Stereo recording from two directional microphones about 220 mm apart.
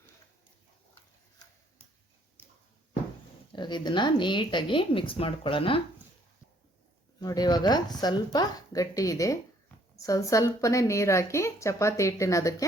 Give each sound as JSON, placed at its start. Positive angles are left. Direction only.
{"t": 3.5, "sound": "speech", "side_deg": 20}
{"t": 7.2, "sound": "a woman's voice", "side_deg": 20}